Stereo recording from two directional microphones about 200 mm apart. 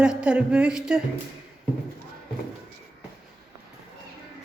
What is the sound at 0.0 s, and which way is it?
A woman's voice, 5° right (ahead or behind).